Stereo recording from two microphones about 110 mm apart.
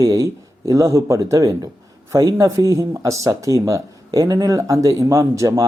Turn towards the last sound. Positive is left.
turn(degrees=-30)  # may be behind; listen again after turning